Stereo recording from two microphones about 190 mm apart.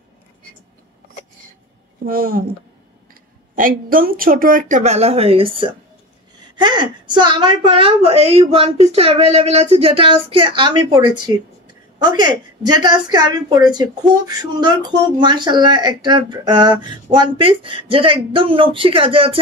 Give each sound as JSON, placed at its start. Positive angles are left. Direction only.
{"t": 2.0, "sound": "speech", "side_deg": -50}
{"t": 3.5, "sound": "a woman's voice", "side_deg": -45}